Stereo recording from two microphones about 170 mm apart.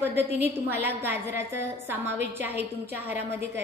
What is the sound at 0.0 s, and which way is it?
A woman's voice, 10° right (ahead or behind).